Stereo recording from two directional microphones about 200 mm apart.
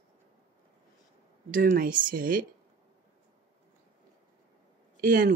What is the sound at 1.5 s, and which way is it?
Speech, 45° right (ahead or behind).